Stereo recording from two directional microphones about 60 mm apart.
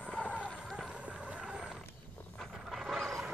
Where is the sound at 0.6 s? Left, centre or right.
Centre.